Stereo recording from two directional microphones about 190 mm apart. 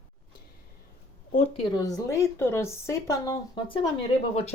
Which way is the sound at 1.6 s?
20° left (ahead or behind).